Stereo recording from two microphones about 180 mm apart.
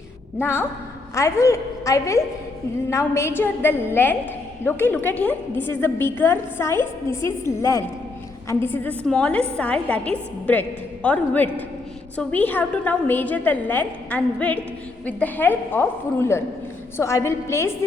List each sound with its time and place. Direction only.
0.3 s a woman's voice: 15° left (ahead or behind)